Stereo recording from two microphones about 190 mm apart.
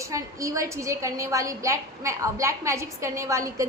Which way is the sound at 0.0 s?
15° right (ahead or behind).